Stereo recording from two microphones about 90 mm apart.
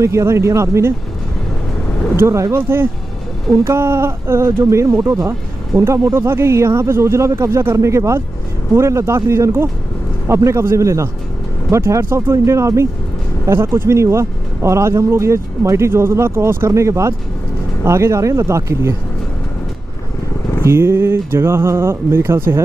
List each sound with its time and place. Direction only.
0.0 s speech: 30° right (ahead or behind)
2.1 s speech: 30° right (ahead or behind)
20.6 s speech: 30° right (ahead or behind)